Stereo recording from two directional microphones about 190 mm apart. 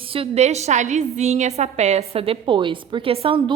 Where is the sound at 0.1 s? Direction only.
30° right (ahead or behind).